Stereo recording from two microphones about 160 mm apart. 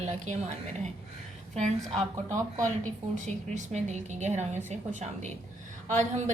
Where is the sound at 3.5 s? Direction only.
45° right (ahead or behind).